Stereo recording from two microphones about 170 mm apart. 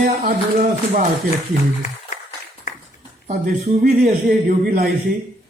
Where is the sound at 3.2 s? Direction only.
50° right (ahead or behind).